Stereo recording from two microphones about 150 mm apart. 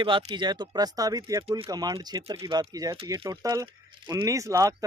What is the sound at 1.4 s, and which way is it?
Speech, 40° right (ahead or behind).